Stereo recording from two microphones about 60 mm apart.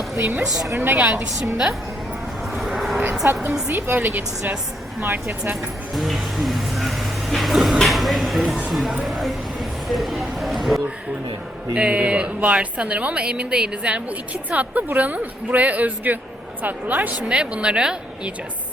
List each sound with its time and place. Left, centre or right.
0.7 s a woman's voice: right
0.9 s speech: right
2.6 s vehicle: centre
3.2 s speech: right
5.9 s a sound: centre
8.7 s speech: centre
9.9 s a sound: centre
11.7 s a woman's voice: centre
17.3 s a woman's voice: centre